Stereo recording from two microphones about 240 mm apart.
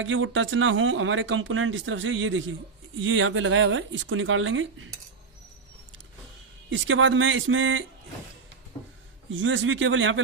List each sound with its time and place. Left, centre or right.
0.0 s speech: right
6.7 s speech: right
9.3 s speech: right